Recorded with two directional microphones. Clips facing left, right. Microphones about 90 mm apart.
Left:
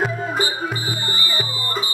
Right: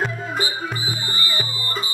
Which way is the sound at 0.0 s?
5° left (ahead or behind).